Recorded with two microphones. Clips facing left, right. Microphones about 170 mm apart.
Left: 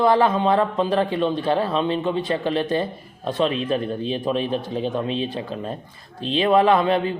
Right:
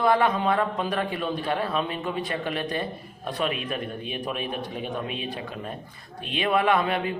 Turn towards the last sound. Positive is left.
turn(degrees=30)  # may be behind; listen again after turning